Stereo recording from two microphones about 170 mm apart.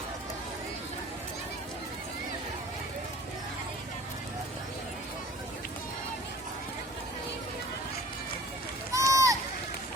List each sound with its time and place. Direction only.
8.9 s run: 20° right (ahead or behind)